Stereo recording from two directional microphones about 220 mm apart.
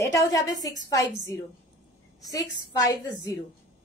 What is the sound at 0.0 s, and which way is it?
Speech, 15° left (ahead or behind).